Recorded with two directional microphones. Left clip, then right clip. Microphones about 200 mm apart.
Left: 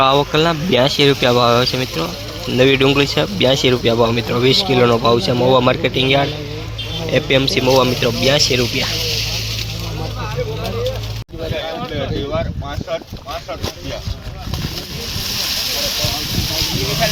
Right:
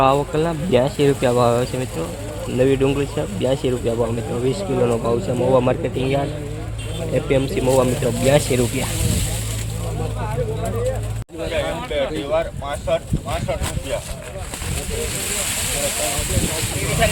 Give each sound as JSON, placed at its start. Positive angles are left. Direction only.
{"t": 0.0, "sound": "speech", "side_deg": 5}